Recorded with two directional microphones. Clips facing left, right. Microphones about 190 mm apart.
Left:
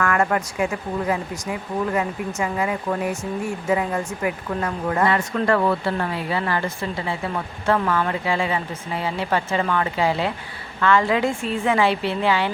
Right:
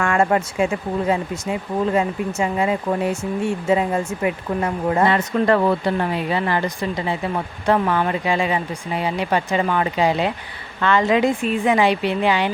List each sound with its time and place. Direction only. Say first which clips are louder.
0.0 s speech: right 3 dB; 25° right (ahead or behind)